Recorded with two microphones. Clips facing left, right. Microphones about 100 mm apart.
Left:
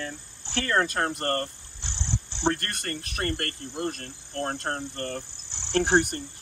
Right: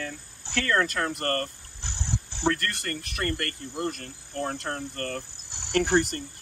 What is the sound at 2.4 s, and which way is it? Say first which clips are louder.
Speech: even; 25° left (ahead or behind).